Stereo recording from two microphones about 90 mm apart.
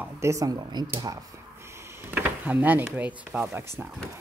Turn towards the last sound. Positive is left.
turn(degrees=-30)  # may be behind; listen again after turning